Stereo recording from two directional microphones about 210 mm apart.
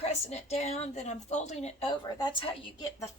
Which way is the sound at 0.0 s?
30° left (ahead or behind).